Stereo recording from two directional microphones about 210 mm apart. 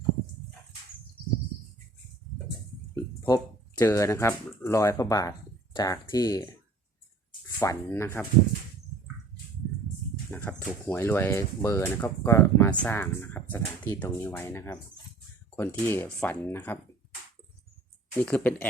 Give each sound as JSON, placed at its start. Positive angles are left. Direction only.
{"t": 2.9, "sound": "speech", "side_deg": 15}
{"t": 10.3, "sound": "speech", "side_deg": 10}
{"t": 18.1, "sound": "speech", "side_deg": 10}